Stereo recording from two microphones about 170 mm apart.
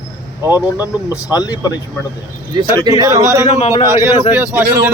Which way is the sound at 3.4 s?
40° left (ahead or behind).